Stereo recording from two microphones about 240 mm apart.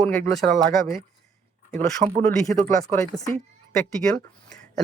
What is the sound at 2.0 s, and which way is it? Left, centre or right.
Speech, right.